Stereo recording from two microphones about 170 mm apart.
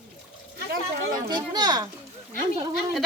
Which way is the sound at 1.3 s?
25° right (ahead or behind).